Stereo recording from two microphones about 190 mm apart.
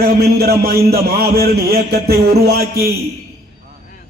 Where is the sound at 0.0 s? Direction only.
55° right (ahead or behind).